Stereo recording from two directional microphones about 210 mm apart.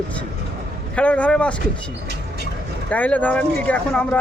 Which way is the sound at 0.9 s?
5° left (ahead or behind).